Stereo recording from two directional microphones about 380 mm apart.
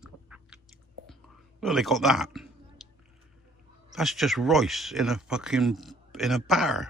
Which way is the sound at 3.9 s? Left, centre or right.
Centre.